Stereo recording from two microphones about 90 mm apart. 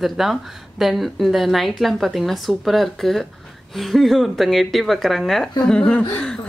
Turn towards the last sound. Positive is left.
turn(degrees=20)  # may be behind; listen again after turning